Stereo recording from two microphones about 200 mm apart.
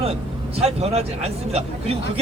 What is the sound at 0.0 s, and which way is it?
Speech, 30° right (ahead or behind).